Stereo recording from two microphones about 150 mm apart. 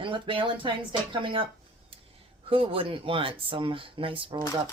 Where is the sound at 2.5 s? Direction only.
35° right (ahead or behind).